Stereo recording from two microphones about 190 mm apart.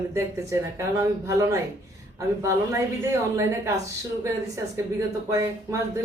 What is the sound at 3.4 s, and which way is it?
Speech, 15° right (ahead or behind).